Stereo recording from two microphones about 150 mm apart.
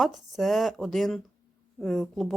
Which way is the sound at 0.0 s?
Centre (ahead or behind).